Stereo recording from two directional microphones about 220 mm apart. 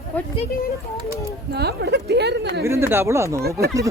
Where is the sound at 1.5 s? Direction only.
50° right (ahead or behind).